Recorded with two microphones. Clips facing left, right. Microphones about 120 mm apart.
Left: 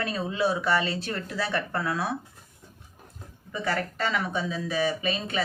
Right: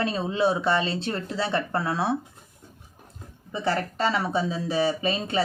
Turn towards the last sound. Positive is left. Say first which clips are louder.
# right 3 dB
turn(degrees=-30)  # may be behind; listen again after turning